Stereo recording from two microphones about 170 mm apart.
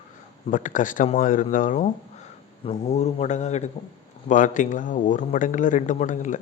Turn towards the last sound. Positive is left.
turn(degrees=45)  # may be behind; listen again after turning